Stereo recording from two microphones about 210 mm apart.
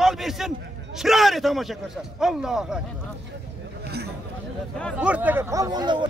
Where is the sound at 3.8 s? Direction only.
50° right (ahead or behind).